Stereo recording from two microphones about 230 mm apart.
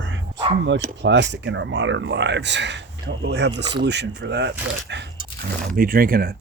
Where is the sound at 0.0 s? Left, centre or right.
Right.